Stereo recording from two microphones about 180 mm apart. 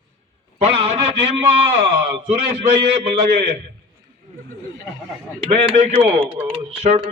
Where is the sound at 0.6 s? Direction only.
35° right (ahead or behind).